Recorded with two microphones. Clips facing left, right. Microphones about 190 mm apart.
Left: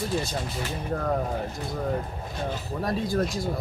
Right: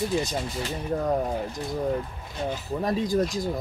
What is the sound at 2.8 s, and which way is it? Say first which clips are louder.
Speech: right 2 dB; 20° right (ahead or behind).